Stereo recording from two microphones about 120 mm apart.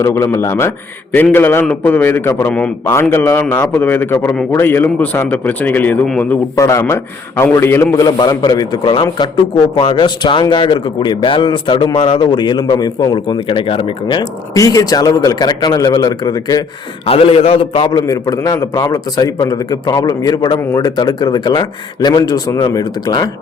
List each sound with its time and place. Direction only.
0.0 s a man's voice: 25° left (ahead or behind)
2.5 s speech: 10° left (ahead or behind)
2.9 s a man's voice: 20° left (ahead or behind)
6.6 s a man's voice: 25° left (ahead or behind)
13.5 s a man's voice: 45° left (ahead or behind)
14.5 s a man's voice: 30° left (ahead or behind)
17.1 s a man's voice: 55° left (ahead or behind)
18.0 s a man's voice: 30° left (ahead or behind)